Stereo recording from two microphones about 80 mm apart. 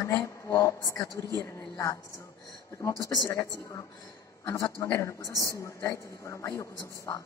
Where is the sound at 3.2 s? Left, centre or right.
Left.